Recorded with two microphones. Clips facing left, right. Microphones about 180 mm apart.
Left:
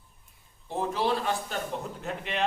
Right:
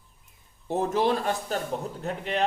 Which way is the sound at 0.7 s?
45° right (ahead or behind).